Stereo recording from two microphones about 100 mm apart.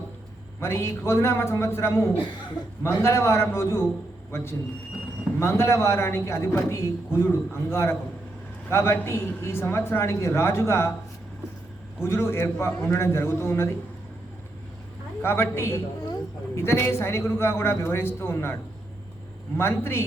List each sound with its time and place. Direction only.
0.6 s a man's voice: 30° left (ahead or behind)
11.9 s a man's voice: 25° left (ahead or behind)
15.2 s a man's voice: 25° left (ahead or behind)
19.5 s a man's voice: 25° left (ahead or behind)